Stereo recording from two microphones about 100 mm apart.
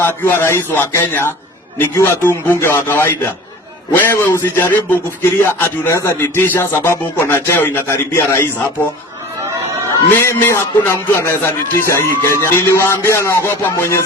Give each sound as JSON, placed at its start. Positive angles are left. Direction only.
{"t": 0.0, "sound": "a man's voice", "side_deg": 20}
{"t": 10.1, "sound": "a man's voice", "side_deg": 20}